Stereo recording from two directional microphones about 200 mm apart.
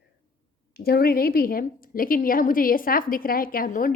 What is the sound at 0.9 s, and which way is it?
A woman's voice, 50° left (ahead or behind).